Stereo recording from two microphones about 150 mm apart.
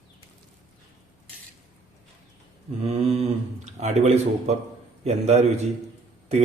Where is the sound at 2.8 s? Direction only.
45° right (ahead or behind).